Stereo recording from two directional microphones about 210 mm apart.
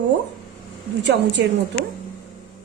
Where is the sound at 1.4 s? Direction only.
55° right (ahead or behind).